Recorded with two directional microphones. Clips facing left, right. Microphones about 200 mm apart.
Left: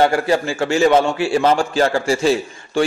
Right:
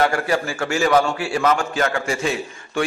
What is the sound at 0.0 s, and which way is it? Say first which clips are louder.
A man's voice: left 4 dB; 25° left (ahead or behind).